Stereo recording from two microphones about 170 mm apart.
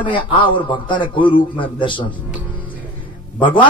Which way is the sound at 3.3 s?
30° left (ahead or behind).